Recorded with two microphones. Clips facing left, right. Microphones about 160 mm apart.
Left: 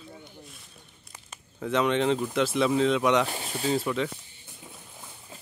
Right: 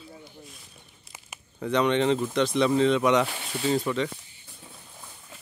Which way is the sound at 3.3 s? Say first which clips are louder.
Left 3 dB; 30° left (ahead or behind).